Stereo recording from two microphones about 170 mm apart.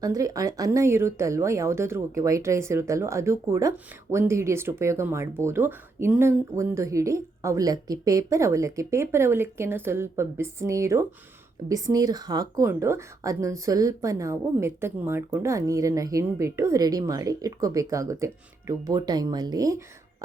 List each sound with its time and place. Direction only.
0.0 s a woman's voice: 20° right (ahead or behind)